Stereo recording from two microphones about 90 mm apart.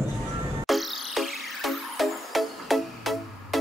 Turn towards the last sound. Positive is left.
turn(degrees=0)  # may be behind; listen again after turning